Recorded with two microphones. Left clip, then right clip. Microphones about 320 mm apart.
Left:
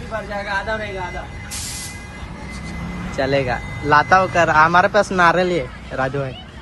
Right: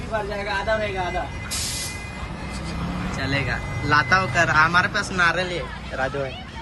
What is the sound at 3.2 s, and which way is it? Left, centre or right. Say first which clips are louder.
A man's voice: left 8 dB; centre.